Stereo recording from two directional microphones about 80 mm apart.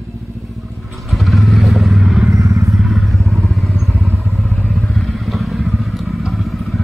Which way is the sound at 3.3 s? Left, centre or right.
Centre.